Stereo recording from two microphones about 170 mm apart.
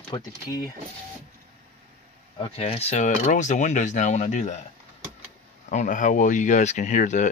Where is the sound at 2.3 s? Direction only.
35° left (ahead or behind).